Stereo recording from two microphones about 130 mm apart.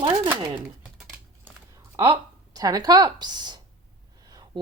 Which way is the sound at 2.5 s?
30° right (ahead or behind).